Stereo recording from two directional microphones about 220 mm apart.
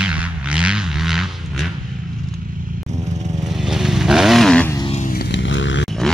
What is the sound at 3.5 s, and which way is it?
Motorcycle, centre (ahead or behind).